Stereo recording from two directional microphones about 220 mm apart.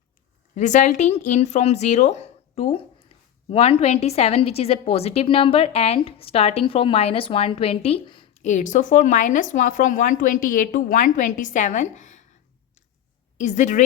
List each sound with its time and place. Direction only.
0.5 s a woman's voice: 35° left (ahead or behind)
13.4 s a woman's voice: 35° left (ahead or behind)